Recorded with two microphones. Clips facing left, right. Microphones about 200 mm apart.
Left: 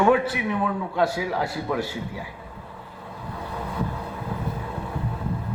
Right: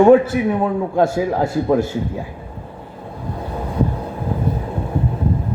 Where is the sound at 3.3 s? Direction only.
40° right (ahead or behind).